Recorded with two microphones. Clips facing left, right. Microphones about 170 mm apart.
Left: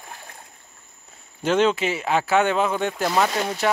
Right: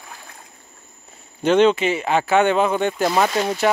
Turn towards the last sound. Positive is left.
turn(degrees=-5)  # may be behind; listen again after turning